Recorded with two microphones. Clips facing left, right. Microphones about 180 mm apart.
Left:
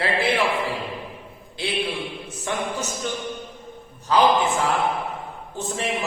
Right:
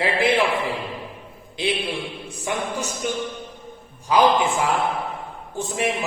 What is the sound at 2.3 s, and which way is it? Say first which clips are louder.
Speech: right 1 dB; 10° right (ahead or behind).